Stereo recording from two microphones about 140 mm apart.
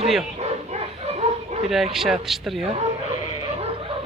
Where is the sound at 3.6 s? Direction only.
45° right (ahead or behind).